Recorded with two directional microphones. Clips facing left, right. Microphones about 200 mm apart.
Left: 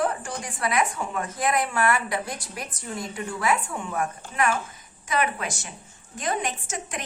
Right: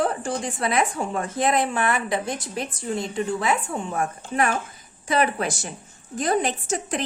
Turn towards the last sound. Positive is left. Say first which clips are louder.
# right 7 dB
turn(degrees=-35)  # may be behind; listen again after turning